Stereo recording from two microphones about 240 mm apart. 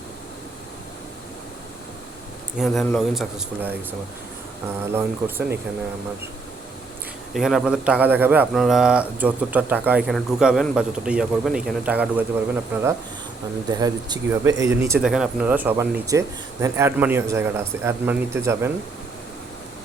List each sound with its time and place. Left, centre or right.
2.6 s a man's voice: centre
4.9 s speech: centre
7.3 s a man's voice: centre
13.7 s speech: centre